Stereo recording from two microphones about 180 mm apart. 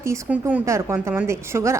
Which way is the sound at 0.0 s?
15° right (ahead or behind).